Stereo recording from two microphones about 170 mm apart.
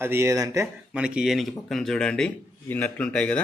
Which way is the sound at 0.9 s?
5° right (ahead or behind).